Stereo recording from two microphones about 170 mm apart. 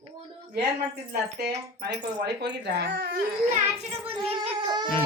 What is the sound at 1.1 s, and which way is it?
Speech, 70° right (ahead or behind).